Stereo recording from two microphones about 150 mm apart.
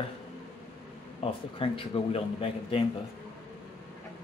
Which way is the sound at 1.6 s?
35° left (ahead or behind).